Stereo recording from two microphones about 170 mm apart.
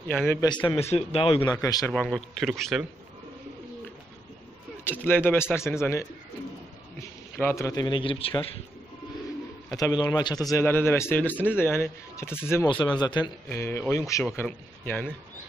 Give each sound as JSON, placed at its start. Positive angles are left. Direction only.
{"t": 0.1, "sound": "speech", "side_deg": 10}
{"t": 0.5, "sound": "a man's voice", "side_deg": 30}
{"t": 1.5, "sound": "speech", "side_deg": 20}
{"t": 1.9, "sound": "speech", "side_deg": 5}
{"t": 5.0, "sound": "speech", "side_deg": 10}
{"t": 7.3, "sound": "speech", "side_deg": 15}
{"t": 9.8, "sound": "speech", "side_deg": 20}
{"t": 12.6, "sound": "speech", "side_deg": 25}
{"t": 13.5, "sound": "speech", "side_deg": 15}